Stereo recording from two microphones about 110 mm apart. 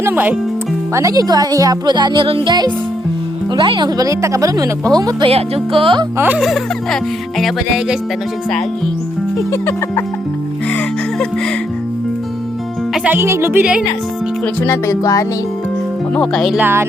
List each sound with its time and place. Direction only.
0.0 s speech: 15° right (ahead or behind)
0.9 s speech: 30° right (ahead or behind)
5.2 s music: 60° right (ahead or behind)
6.1 s speech: 15° right (ahead or behind)
6.4 s music: centre (ahead or behind)
9.5 s music: 25° left (ahead or behind)
13.1 s speech: 25° right (ahead or behind)
14.7 s music: 30° left (ahead or behind)
16.1 s speech: 5° left (ahead or behind)
16.6 s speech: 20° right (ahead or behind)